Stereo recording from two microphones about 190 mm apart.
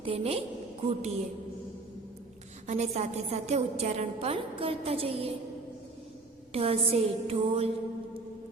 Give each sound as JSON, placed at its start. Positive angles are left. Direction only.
{"t": 0.0, "sound": "a woman's voice", "side_deg": -30}
{"t": 2.6, "sound": "a woman's voice", "side_deg": -35}
{"t": 6.5, "sound": "a woman's voice", "side_deg": -30}